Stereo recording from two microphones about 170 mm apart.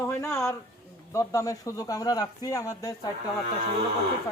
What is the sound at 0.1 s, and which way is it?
Speech, 15° left (ahead or behind).